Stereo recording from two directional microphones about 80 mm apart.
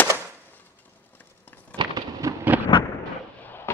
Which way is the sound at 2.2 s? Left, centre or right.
Right.